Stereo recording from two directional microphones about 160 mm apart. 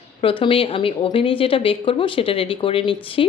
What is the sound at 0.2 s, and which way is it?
Speech, 35° left (ahead or behind).